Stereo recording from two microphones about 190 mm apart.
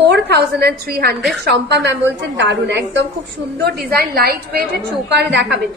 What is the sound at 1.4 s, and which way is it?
A woman's voice, 65° right (ahead or behind).